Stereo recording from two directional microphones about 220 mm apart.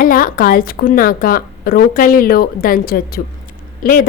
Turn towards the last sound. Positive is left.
turn(degrees=40)  # may be behind; listen again after turning